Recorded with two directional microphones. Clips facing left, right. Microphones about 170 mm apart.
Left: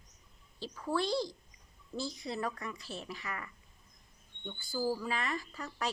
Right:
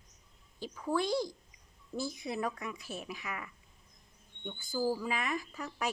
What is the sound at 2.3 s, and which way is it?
Speech, 10° right (ahead or behind).